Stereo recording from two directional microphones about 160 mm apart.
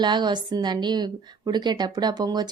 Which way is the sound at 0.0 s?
30° right (ahead or behind).